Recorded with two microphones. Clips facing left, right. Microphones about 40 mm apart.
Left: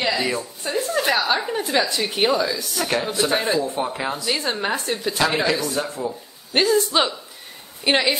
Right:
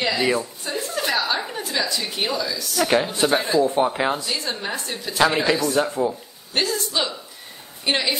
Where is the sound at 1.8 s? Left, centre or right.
Left.